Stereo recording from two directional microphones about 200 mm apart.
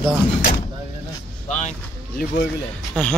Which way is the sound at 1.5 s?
35° left (ahead or behind).